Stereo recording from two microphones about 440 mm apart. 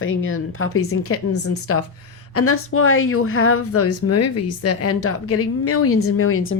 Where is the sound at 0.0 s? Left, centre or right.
Left.